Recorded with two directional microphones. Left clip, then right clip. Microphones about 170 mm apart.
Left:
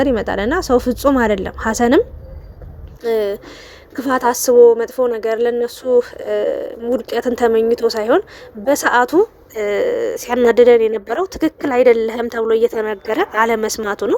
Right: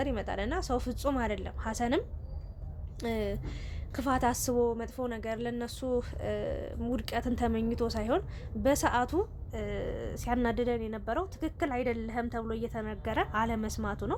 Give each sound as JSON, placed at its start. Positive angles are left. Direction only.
{"t": 0.0, "sound": "a woman's voice", "side_deg": 40}
{"t": 3.1, "sound": "a woman's voice", "side_deg": 40}